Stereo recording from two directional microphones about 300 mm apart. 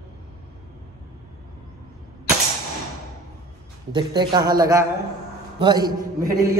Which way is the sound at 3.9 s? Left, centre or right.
Centre.